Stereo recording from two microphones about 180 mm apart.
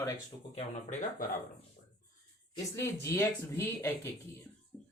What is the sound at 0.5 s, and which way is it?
Speech, 40° left (ahead or behind).